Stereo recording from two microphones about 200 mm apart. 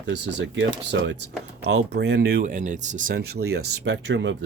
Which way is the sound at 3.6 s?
65° right (ahead or behind).